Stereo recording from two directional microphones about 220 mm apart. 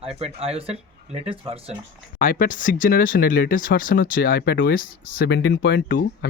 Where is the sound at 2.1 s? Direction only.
40° left (ahead or behind).